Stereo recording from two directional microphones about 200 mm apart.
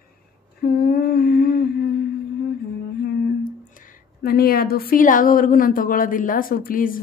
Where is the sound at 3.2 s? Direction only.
45° left (ahead or behind).